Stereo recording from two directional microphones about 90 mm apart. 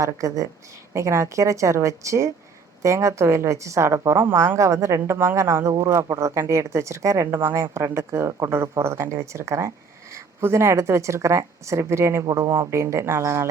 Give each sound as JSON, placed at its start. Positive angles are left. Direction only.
{"t": 0.0, "sound": "speech", "side_deg": -40}